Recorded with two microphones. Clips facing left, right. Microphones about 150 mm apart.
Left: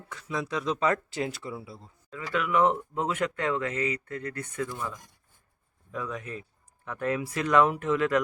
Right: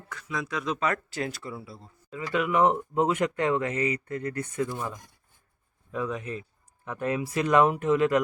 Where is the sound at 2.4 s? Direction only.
30° right (ahead or behind).